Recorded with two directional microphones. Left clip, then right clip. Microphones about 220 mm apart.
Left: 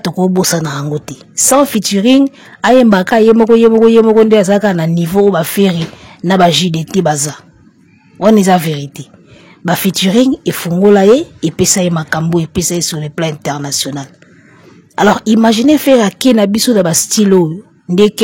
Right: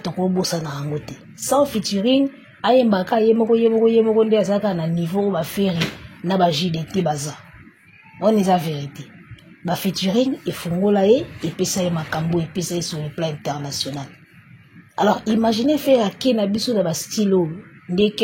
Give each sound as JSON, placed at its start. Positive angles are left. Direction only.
{"t": 0.0, "sound": "speech", "side_deg": 50}